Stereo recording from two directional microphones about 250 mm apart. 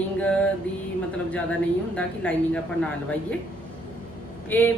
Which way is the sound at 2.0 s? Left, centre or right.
Centre.